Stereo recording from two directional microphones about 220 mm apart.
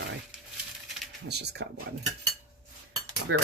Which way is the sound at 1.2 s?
50° right (ahead or behind).